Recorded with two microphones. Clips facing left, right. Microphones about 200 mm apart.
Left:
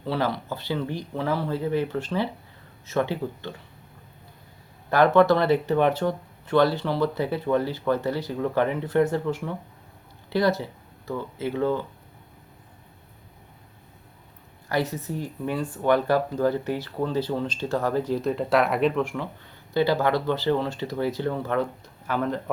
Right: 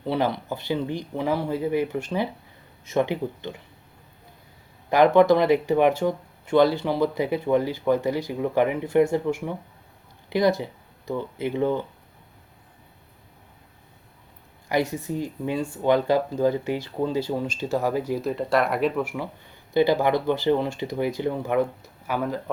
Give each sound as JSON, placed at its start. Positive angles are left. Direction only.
{"t": 0.0, "sound": "speech", "side_deg": -15}
{"t": 4.9, "sound": "speech", "side_deg": -15}
{"t": 14.7, "sound": "speech", "side_deg": -15}